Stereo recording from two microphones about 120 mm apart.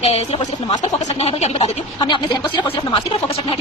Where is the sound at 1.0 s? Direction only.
60° left (ahead or behind).